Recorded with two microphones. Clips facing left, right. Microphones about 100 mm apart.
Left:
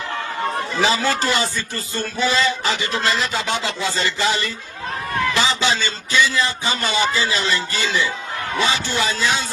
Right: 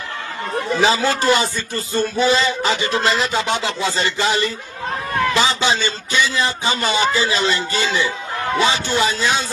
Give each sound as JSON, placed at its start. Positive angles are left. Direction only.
{"t": 0.8, "sound": "a man's voice", "side_deg": -20}